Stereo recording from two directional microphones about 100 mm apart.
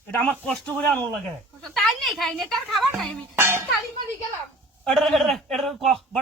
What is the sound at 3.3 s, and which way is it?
Music, 25° right (ahead or behind).